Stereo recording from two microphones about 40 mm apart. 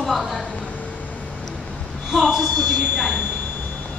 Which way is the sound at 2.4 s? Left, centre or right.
Centre.